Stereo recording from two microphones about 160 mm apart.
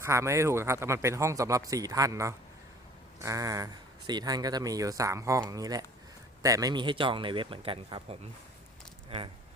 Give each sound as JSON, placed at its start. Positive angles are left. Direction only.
{"t": 0.0, "sound": "speech", "side_deg": -20}
{"t": 9.0, "sound": "speech", "side_deg": -35}